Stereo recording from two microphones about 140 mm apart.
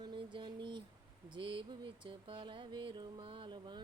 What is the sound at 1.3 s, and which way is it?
Music, 35° right (ahead or behind).